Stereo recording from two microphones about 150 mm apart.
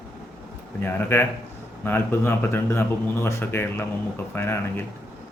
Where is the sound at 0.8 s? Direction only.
15° left (ahead or behind).